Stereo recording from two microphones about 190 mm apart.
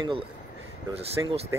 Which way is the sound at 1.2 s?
15° right (ahead or behind).